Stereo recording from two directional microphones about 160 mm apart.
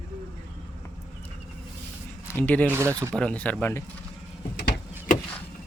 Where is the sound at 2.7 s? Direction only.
15° right (ahead or behind).